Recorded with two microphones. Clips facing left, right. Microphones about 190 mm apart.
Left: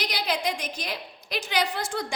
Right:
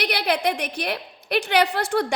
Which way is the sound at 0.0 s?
60° right (ahead or behind).